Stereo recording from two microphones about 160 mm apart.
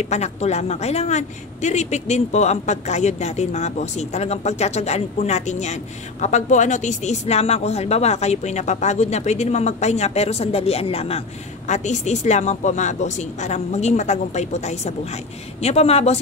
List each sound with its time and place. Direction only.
0.0 s a woman's voice: 45° left (ahead or behind)